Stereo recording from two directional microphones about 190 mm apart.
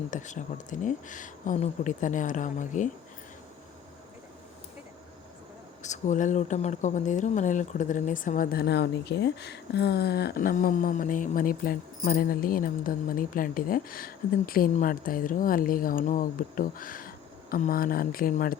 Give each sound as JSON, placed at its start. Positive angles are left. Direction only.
{"t": 0.1, "sound": "speech", "side_deg": 40}
{"t": 5.8, "sound": "speech", "side_deg": 40}